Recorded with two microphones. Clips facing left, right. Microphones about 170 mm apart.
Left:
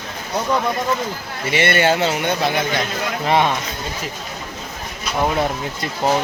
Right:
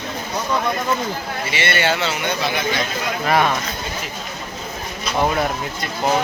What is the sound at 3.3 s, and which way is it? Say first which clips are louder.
Speech: left 1 dB; 25° left (ahead or behind).